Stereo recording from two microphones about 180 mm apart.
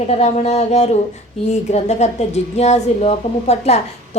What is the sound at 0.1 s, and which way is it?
A woman's voice, 40° left (ahead or behind).